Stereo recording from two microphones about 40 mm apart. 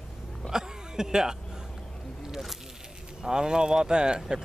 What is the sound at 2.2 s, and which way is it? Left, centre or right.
Snake, centre.